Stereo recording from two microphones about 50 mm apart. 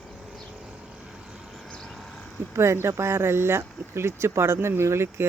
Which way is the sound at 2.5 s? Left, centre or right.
Right.